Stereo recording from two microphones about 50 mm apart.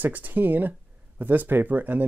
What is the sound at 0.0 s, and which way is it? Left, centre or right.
Speech, right.